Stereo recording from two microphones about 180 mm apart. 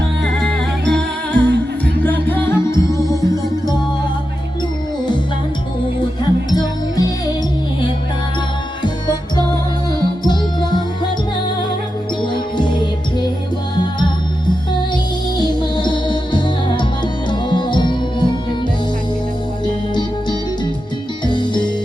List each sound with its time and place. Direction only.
0.3 s music: 5° left (ahead or behind); by 3.8 s 20° left (ahead or behind)
6.5 s music: 20° left (ahead or behind)
8.8 s music: 25° left (ahead or behind)
12.2 s music: 25° left (ahead or behind)
15.4 s music: 25° left (ahead or behind)
19.9 s music: 25° left (ahead or behind)